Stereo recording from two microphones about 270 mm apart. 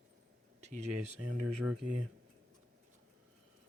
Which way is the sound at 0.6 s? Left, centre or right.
Right.